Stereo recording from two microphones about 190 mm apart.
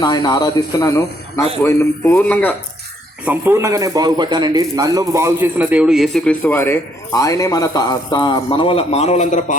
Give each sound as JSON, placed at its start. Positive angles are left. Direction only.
{"t": 0.0, "sound": "a man's voice", "side_deg": 20}
{"t": 1.6, "sound": "a sound", "side_deg": 15}
{"t": 3.2, "sound": "a man's voice", "side_deg": -15}
{"t": 6.4, "sound": "a man's voice", "side_deg": 15}